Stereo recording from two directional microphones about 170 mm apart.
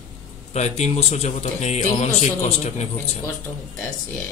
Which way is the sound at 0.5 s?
40° left (ahead or behind).